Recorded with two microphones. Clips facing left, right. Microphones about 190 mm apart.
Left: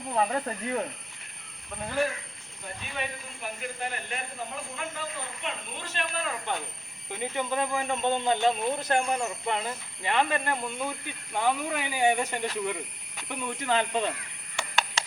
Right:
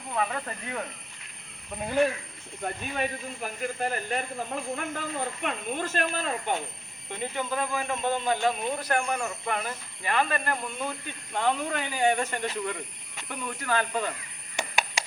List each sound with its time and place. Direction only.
0.1 s speech: 30° left (ahead or behind)
2.8 s speech: 45° right (ahead or behind)
4.7 s speech: 50° right (ahead or behind)
7.1 s speech: 15° left (ahead or behind)
14.5 s a sound: 15° right (ahead or behind)